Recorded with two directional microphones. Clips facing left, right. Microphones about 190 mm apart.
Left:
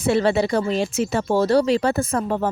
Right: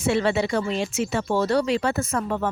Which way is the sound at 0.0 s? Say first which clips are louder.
Left 3 dB; 35° left (ahead or behind).